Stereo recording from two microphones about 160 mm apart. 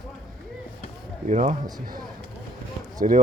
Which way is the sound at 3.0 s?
60° right (ahead or behind).